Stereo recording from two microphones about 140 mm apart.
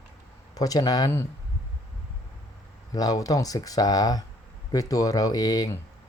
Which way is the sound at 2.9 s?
25° left (ahead or behind).